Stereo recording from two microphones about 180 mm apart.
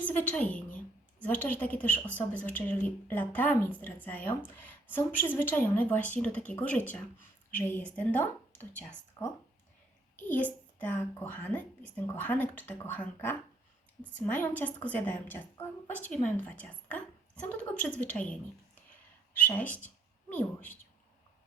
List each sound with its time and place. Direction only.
0.0 s a woman's voice: 10° left (ahead or behind)
9.2 s speech: 20° left (ahead or behind)
10.2 s a woman's voice: 10° left (ahead or behind)
18.9 s a sound: 10° left (ahead or behind)
20.3 s a woman's voice: 10° left (ahead or behind)